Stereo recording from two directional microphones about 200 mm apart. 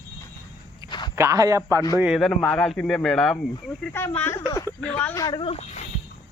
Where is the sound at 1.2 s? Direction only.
15° right (ahead or behind).